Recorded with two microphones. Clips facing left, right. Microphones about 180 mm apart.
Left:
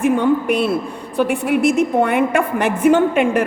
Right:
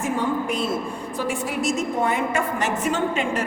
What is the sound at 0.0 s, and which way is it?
A woman's voice, 65° left (ahead or behind).